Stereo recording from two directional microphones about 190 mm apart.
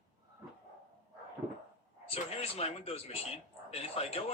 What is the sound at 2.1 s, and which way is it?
Speech, 30° left (ahead or behind).